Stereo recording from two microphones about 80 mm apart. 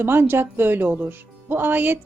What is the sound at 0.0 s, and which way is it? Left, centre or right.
A woman's voice, right.